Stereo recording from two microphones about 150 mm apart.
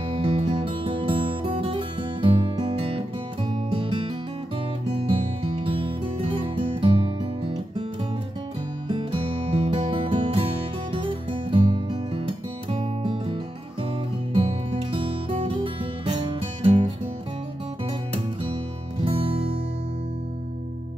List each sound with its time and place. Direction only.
0.1 s music: 35° right (ahead or behind)
14.7 s music: 40° right (ahead or behind)
19.0 s music: 40° right (ahead or behind)